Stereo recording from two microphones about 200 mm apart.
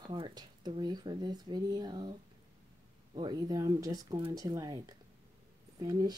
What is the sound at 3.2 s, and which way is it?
Speech, 20° right (ahead or behind).